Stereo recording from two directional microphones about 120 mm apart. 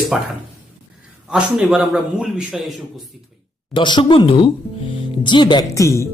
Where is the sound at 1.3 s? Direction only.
10° right (ahead or behind).